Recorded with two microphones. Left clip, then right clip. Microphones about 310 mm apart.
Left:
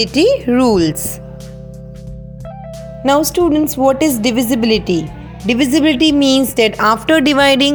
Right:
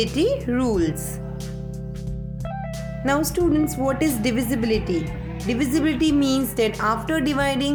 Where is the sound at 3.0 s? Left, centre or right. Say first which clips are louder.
Left 9 dB; left.